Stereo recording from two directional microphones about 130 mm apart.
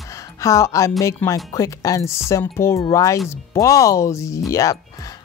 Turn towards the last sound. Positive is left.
turn(degrees=25)  # may be behind; listen again after turning